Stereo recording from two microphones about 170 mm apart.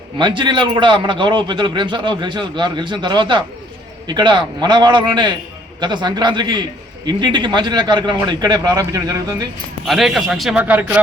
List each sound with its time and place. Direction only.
0.2 s a man's voice: 25° right (ahead or behind)
9.8 s a man's voice: centre (ahead or behind)